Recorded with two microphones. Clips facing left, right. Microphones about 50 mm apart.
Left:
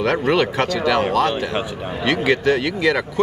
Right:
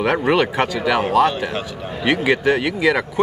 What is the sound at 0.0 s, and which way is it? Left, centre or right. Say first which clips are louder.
Speech: right 1 dB; centre.